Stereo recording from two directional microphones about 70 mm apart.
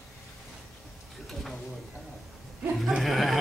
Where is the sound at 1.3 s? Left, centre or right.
Centre.